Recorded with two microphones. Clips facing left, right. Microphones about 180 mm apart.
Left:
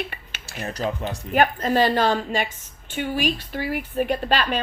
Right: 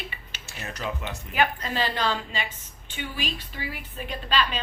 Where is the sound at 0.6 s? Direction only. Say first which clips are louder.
Left 6 dB; 40° left (ahead or behind); by 4.6 s 55° left (ahead or behind).